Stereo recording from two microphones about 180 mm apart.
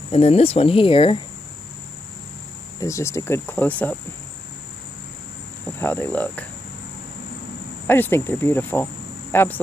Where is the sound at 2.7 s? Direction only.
15° left (ahead or behind).